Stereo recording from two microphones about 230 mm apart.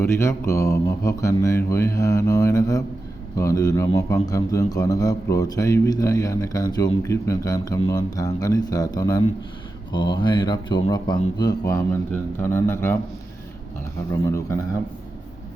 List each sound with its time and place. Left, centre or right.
0.0 s a man's voice: centre
14.3 s a man's voice: centre